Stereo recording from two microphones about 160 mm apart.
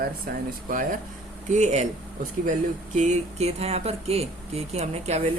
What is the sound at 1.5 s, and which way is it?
Speech, 45° right (ahead or behind).